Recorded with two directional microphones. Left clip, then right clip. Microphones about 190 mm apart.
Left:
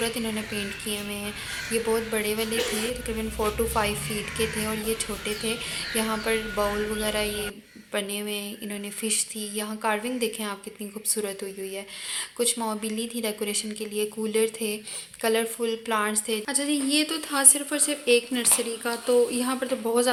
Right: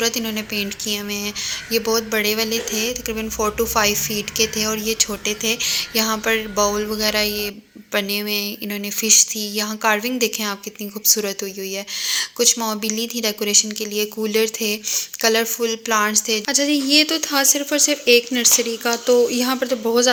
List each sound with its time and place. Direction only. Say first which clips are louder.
0.0 s speech: right 7 dB; 15° right (ahead or behind)
12.0 s speech: right 10 dB; 20° right (ahead or behind)